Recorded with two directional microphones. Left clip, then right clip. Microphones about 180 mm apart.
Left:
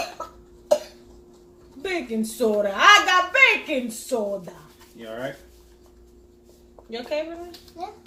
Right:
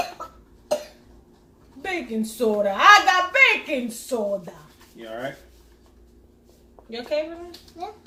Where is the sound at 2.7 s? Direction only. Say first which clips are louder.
Right 1 dB; 35° right (ahead or behind).